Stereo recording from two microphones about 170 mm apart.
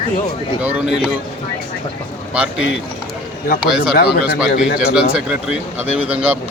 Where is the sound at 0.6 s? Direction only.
10° right (ahead or behind).